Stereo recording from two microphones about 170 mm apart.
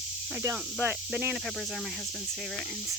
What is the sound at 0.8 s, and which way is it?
Speech, 5° right (ahead or behind).